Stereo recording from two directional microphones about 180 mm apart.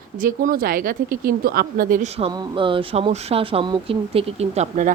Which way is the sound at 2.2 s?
25° right (ahead or behind).